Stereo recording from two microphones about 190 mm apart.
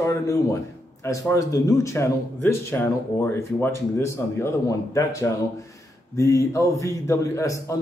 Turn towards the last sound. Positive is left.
turn(degrees=15)  # may be behind; listen again after turning